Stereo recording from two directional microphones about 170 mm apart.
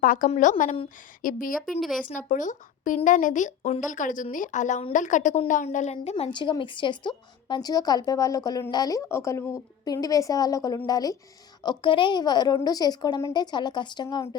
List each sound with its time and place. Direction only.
0.0 s a woman's voice: 55° left (ahead or behind)
1.5 s a woman's voice: centre (ahead or behind)
2.0 s a woman's voice: 50° left (ahead or behind); by 14.3 s 25° left (ahead or behind)